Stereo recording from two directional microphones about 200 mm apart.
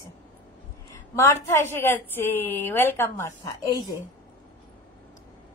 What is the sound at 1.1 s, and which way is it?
A woman's voice, 15° left (ahead or behind).